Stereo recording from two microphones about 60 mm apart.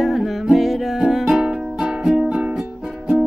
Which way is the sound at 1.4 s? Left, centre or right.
Centre.